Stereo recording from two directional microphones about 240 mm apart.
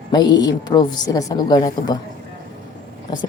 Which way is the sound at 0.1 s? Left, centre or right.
Centre.